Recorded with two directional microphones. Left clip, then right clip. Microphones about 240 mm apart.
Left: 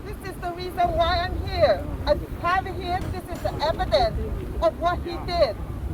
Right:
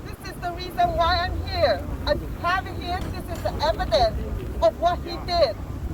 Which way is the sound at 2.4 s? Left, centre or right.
Centre.